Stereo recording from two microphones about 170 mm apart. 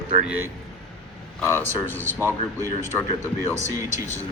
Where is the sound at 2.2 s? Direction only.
15° right (ahead or behind).